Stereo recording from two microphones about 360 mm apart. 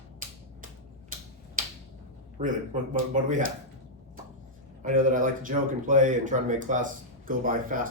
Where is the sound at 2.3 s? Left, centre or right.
Right.